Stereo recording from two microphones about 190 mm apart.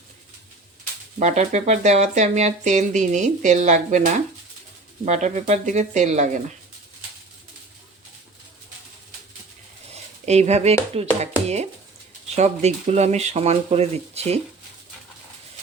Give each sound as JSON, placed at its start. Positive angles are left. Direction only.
{"t": 1.2, "sound": "speech", "side_deg": -35}
{"t": 9.9, "sound": "dishes", "side_deg": -35}
{"t": 10.9, "sound": "speech", "side_deg": -35}